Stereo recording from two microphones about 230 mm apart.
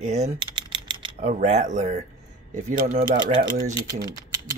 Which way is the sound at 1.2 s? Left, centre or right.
Right.